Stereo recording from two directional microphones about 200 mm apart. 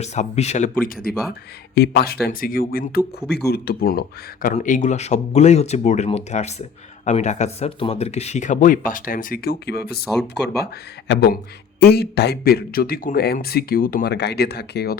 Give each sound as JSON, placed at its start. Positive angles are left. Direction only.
{"t": 0.0, "sound": "speech", "side_deg": 35}
{"t": 1.0, "sound": "speech", "side_deg": 55}
{"t": 4.4, "sound": "speech", "side_deg": 40}